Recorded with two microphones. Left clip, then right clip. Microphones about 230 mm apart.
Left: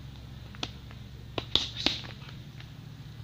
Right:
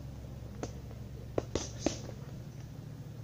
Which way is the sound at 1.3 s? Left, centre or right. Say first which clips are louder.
Left 7 dB; left.